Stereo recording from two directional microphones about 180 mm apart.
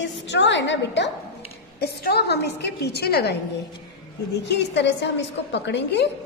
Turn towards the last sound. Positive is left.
turn(degrees=70)  # may be behind; listen again after turning